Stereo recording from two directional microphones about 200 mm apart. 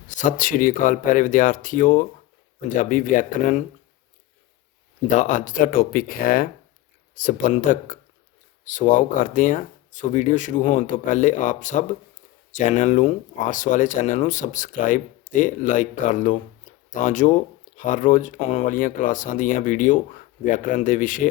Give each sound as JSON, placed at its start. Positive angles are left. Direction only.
{"t": 0.2, "sound": "speech", "side_deg": 40}
{"t": 5.1, "sound": "speech", "side_deg": 40}